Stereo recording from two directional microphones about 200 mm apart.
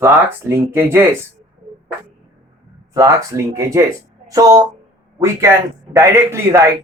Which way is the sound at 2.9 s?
15° right (ahead or behind).